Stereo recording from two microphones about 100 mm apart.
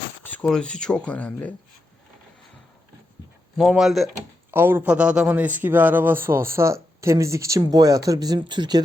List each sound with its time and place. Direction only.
0.2 s speech: 15° left (ahead or behind)
3.6 s speech: centre (ahead or behind)
4.5 s a man's voice: 20° right (ahead or behind); by 8.8 s 50° right (ahead or behind)